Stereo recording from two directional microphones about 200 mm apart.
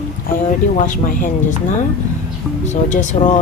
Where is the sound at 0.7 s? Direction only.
40° left (ahead or behind).